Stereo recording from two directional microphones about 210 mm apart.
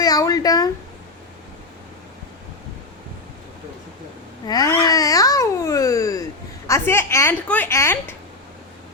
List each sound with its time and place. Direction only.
0.0 s a sound: 15° left (ahead or behind)
4.4 s babbling: 20° left (ahead or behind)
6.7 s a woman's voice: 10° left (ahead or behind)